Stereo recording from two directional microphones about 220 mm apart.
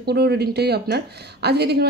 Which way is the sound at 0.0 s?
45° right (ahead or behind).